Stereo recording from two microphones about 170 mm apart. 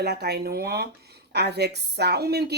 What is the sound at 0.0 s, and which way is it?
Speech, 75° right (ahead or behind).